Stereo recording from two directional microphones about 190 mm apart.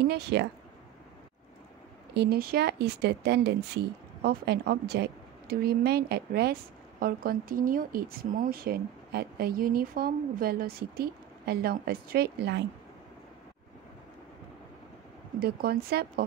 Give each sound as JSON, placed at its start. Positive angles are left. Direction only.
{"t": 0.0, "sound": "speech", "side_deg": -60}
{"t": 2.1, "sound": "speech", "side_deg": -55}
{"t": 15.3, "sound": "speech", "side_deg": -55}